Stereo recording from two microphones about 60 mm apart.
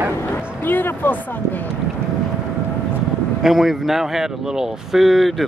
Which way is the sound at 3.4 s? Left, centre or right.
Centre.